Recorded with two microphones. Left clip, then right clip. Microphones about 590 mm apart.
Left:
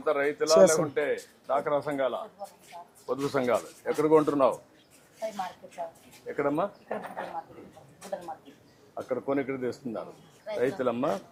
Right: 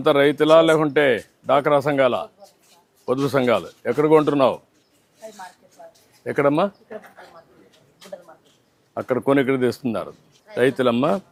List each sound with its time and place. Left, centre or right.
0.0 s speech: right
1.5 s speech: right
3.1 s speech: right
6.2 s speech: right
9.0 s speech: right
10.6 s speech: right